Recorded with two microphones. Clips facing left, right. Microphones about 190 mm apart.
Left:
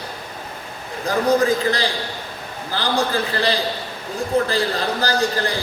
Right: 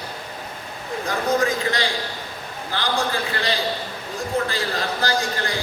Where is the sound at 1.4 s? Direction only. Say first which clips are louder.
Left 4 dB; 35° left (ahead or behind).